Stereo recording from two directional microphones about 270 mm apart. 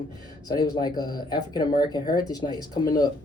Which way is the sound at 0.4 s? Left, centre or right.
Centre.